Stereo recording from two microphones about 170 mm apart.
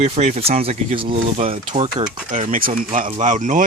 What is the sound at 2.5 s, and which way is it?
Speech, 55° right (ahead or behind).